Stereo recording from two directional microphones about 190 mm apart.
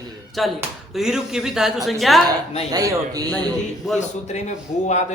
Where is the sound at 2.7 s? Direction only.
20° right (ahead or behind).